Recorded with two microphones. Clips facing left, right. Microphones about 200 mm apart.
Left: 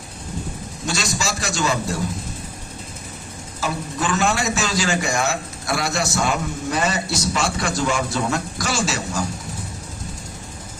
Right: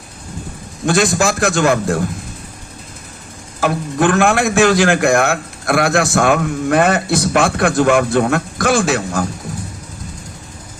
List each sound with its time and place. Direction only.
0.9 s a man's voice: 55° right (ahead or behind)
3.6 s a man's voice: 55° right (ahead or behind)